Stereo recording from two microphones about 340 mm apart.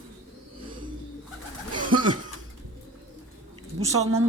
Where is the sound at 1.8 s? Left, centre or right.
Right.